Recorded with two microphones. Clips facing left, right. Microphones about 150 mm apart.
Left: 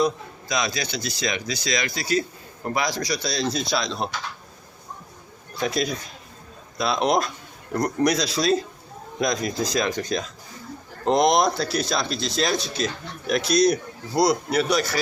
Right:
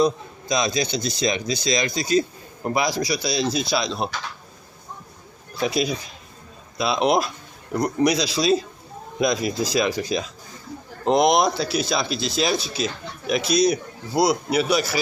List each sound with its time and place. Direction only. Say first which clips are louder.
0.0 s speech: right 3 dB; 25° right (ahead or behind); by 4.1 s 5° right (ahead or behind)
5.5 s speech: right 2 dB; 5° right (ahead or behind)